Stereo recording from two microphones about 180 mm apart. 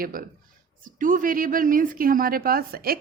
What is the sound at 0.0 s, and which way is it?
A woman's voice, 55° right (ahead or behind).